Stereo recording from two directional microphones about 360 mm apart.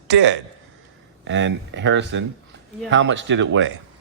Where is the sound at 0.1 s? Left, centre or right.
Right.